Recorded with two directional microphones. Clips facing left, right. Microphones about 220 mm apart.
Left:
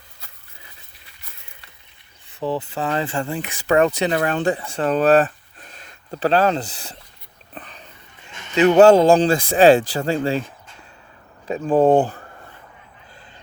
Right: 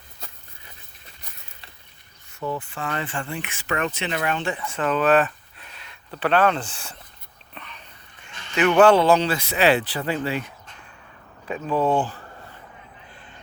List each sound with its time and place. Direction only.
2.4 s speech: 35° left (ahead or behind)
7.5 s whispering: 35° left (ahead or behind)
8.3 s a sound: 25° left (ahead or behind)
8.7 s speech: 40° left (ahead or behind)
11.6 s speech: 50° left (ahead or behind)